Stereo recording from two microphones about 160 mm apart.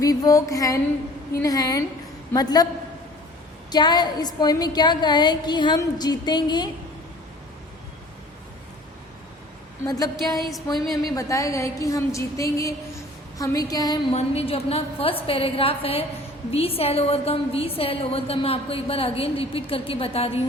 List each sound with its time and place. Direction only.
0.0 s a woman's voice: 20° left (ahead or behind)
3.7 s a woman's voice: 25° left (ahead or behind)
9.8 s a woman's voice: 25° left (ahead or behind)
10.8 s a woman's voice: centre (ahead or behind)
11.1 s a woman's voice: 20° left (ahead or behind)
14.1 s a woman's voice: 40° left (ahead or behind)